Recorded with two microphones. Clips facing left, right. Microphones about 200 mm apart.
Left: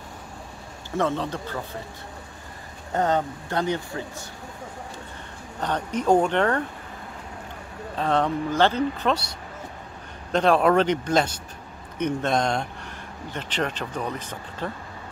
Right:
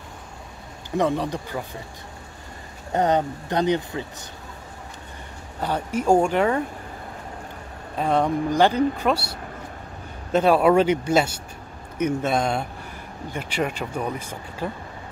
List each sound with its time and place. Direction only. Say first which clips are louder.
0.9 s speech: right 3 dB; 15° right (ahead or behind)
2.9 s speech: right 2 dB; 20° right (ahead or behind)
5.6 s speech: right 1 dB; 10° right (ahead or behind)
8.0 s speech: right 2 dB; 10° right (ahead or behind)